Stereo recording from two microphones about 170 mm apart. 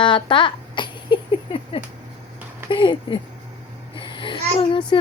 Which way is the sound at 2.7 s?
30° left (ahead or behind).